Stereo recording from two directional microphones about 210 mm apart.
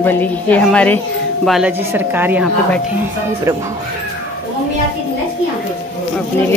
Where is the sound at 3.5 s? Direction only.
15° right (ahead or behind).